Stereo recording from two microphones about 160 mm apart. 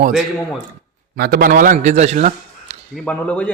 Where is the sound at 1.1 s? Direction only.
70° right (ahead or behind); by 2.7 s 45° right (ahead or behind).